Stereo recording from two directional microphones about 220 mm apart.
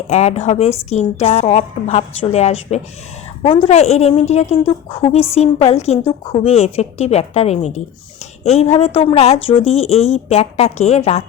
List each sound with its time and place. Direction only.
0.1 s a woman's voice: 30° left (ahead or behind)